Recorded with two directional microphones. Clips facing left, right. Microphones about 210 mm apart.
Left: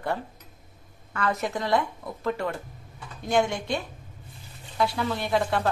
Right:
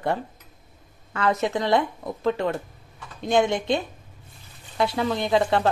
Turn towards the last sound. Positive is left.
turn(degrees=-25)  # may be behind; listen again after turning